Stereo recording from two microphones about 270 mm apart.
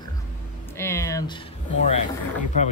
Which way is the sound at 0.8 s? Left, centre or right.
Centre.